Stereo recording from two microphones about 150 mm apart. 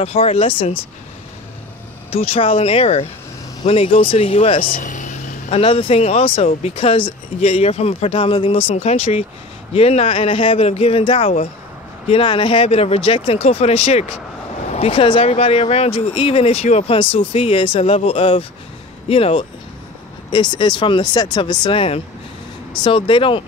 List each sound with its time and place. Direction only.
0.0 s speech: 40° left (ahead or behind)
2.0 s speech: 40° left (ahead or behind)
4.6 s speech: 60° left (ahead or behind)
5.5 s speech: 40° left (ahead or behind)